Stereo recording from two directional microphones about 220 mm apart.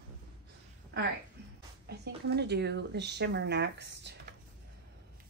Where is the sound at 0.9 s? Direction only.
50° right (ahead or behind).